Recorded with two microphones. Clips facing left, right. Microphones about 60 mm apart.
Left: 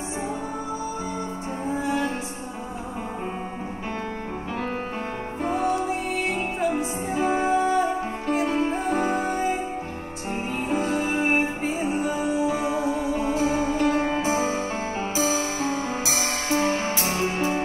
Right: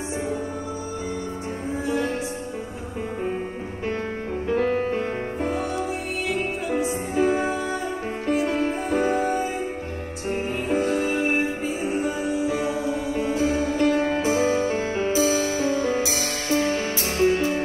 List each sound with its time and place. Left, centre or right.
4.6 s music: right
5.5 s music: left
7.2 s music: left
11.1 s music: left
14.8 s music: right
15.1 s music: left